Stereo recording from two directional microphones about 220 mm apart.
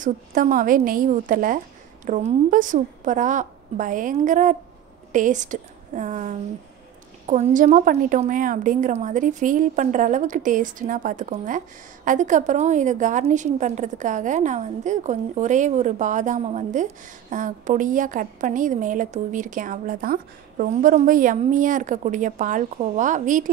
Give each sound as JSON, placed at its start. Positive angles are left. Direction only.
{"t": 0.0, "sound": "a woman's voice", "side_deg": -35}